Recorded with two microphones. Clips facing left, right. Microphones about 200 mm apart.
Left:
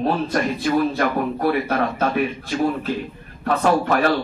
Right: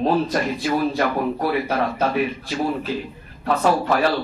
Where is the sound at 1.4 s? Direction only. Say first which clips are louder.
Left 4 dB; 55° left (ahead or behind).